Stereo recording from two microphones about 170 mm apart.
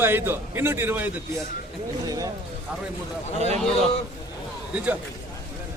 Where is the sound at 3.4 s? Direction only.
40° right (ahead or behind).